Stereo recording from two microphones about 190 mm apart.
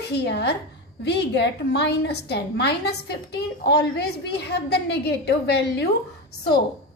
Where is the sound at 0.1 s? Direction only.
60° left (ahead or behind).